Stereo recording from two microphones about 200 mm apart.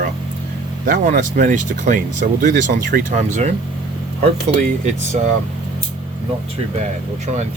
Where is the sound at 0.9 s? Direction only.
40° right (ahead or behind).